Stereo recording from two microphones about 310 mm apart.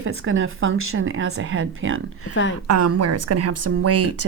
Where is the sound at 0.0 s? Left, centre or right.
Right.